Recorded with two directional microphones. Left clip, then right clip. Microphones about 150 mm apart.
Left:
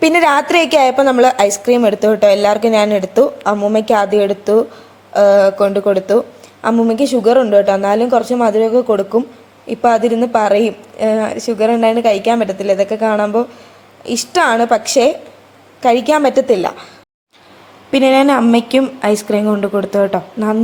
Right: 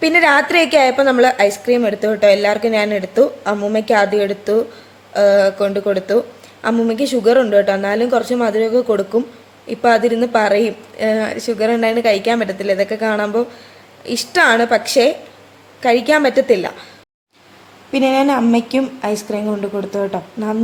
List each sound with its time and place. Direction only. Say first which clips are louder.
0.0 s a woman's voice: left 1 dB; 25° left (ahead or behind)
17.9 s a woman's voice: left 4 dB; 25° left (ahead or behind)